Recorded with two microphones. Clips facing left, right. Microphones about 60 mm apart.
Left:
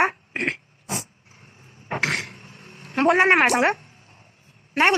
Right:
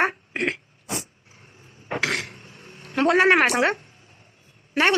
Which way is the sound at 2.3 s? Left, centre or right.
Left.